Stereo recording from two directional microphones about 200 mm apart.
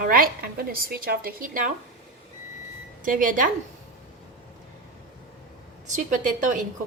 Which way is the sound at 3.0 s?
40° right (ahead or behind).